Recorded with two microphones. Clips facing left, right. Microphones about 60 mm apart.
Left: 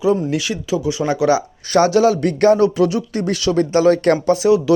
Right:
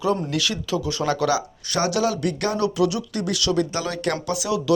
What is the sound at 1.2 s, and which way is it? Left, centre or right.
Speech, left.